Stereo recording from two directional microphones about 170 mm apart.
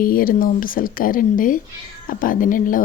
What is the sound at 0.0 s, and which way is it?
Speech, 55° left (ahead or behind).